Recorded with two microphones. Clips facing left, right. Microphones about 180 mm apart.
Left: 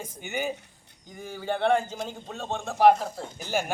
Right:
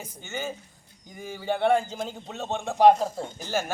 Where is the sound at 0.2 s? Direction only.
15° left (ahead or behind).